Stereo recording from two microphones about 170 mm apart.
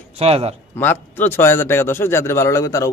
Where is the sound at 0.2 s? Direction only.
35° right (ahead or behind).